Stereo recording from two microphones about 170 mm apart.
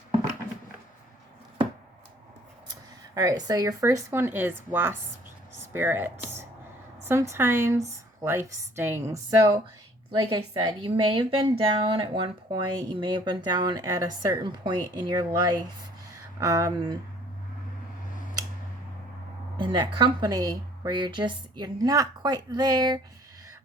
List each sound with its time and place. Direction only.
3.2 s a woman's voice: 20° right (ahead or behind)
19.5 s speech: 25° right (ahead or behind)